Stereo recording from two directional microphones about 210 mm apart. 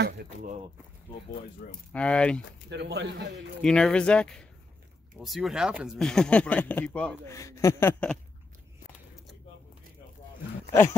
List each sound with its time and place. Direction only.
0.0 s speech: 45° right (ahead or behind)
1.9 s speech: 5° left (ahead or behind)
2.7 s speech: 55° right (ahead or behind)
3.6 s speech: 5° left (ahead or behind)